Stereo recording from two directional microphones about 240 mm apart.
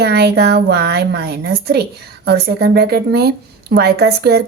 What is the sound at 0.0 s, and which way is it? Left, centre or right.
A woman's voice, right.